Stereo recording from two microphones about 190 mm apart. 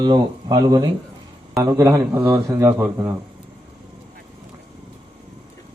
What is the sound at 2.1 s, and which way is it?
Speech, 25° right (ahead or behind).